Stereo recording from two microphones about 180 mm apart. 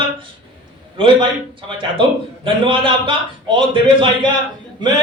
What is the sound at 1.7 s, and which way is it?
A man's voice, 30° right (ahead or behind).